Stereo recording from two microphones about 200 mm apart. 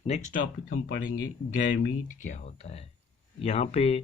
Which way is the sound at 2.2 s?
35° left (ahead or behind).